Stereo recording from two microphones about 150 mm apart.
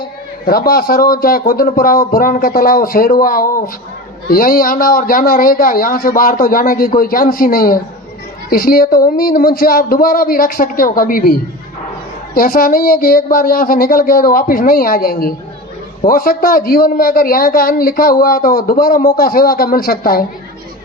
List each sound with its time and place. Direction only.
0.4 s a woman's voice: 85° left